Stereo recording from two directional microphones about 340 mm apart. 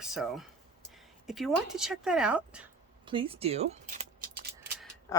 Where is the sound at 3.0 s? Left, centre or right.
Centre.